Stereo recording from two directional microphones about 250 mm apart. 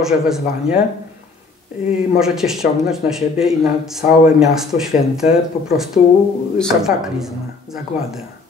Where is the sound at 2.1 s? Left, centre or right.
Centre.